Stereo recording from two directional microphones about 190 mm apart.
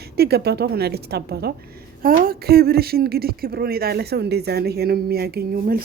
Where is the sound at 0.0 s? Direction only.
55° right (ahead or behind).